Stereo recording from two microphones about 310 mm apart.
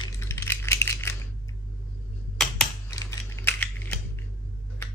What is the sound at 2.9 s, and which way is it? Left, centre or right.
Scissors, centre.